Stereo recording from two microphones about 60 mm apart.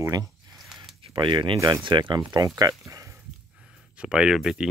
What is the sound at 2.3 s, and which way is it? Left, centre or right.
Speech, right.